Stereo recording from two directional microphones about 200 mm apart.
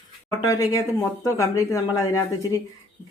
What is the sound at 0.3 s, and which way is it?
Speech, 20° left (ahead or behind).